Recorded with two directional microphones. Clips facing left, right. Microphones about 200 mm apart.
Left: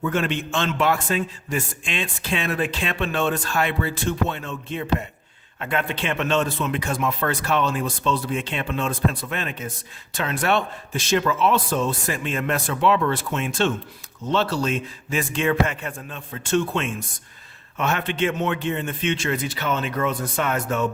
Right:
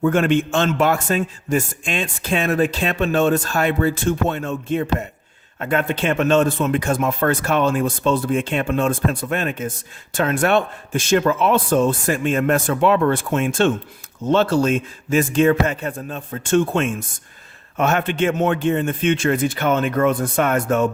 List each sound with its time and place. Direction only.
0.0 s a man's voice: 50° right (ahead or behind)